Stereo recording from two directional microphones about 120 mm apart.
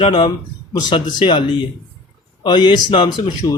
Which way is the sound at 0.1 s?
40° left (ahead or behind).